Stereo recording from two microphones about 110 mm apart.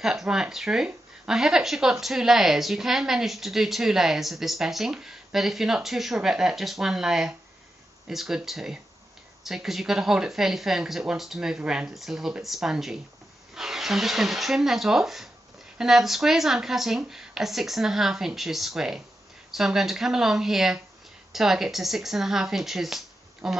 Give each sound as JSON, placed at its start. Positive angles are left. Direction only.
{"t": 0.0, "sound": "speech", "side_deg": -5}